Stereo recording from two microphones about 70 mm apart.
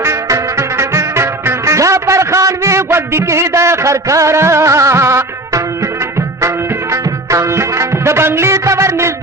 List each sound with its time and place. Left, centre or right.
0.0 s music: right